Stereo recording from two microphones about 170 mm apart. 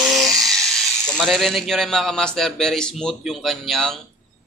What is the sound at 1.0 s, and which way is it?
Speech, centre (ahead or behind).